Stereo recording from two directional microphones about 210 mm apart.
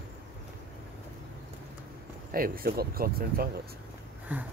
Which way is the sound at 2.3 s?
45° right (ahead or behind).